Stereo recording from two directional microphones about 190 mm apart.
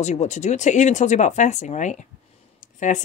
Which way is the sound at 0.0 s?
35° left (ahead or behind).